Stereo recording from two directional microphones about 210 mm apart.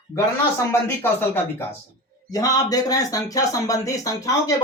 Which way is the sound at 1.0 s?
10° left (ahead or behind).